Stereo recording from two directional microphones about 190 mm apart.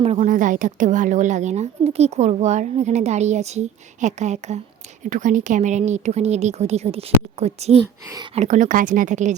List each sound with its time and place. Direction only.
0.0 s a woman's voice: 35° right (ahead or behind)
8.1 s speech: 25° right (ahead or behind)
8.4 s speech: 40° right (ahead or behind)